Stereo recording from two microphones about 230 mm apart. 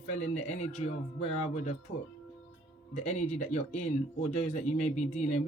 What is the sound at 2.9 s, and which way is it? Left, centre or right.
Speech, left.